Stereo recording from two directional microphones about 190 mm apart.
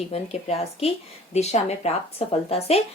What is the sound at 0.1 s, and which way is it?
Speech, 35° left (ahead or behind).